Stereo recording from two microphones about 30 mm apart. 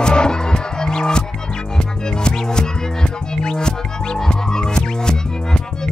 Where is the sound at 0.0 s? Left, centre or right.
Left.